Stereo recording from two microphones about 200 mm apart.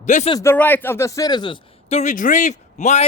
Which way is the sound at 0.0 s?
35° left (ahead or behind).